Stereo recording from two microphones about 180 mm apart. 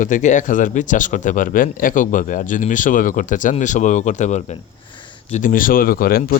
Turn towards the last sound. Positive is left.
turn(degrees=55)  # may be behind; listen again after turning